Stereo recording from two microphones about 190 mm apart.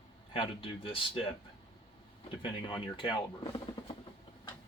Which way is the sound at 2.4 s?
25° left (ahead or behind).